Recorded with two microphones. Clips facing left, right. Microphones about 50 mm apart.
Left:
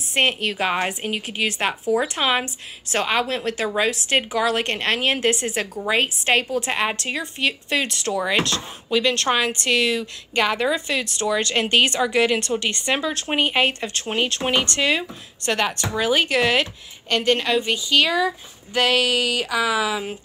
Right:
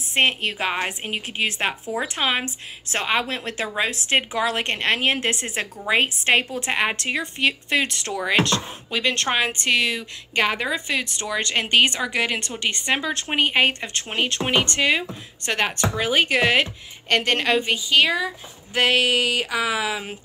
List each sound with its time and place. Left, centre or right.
0.1 s a woman's voice: centre
1.0 s a woman's voice: right
4.1 s speech: right
7.0 s speech: right
17.1 s speech: right
17.6 s speech: right